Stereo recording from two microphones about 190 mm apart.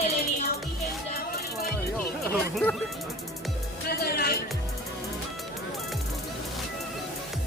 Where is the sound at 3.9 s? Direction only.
55° left (ahead or behind).